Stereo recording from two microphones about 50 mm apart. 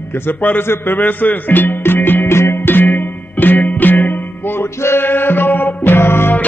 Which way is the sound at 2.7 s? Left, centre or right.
Left.